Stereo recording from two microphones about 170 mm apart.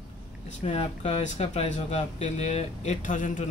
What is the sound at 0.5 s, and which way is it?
Speech, 40° left (ahead or behind).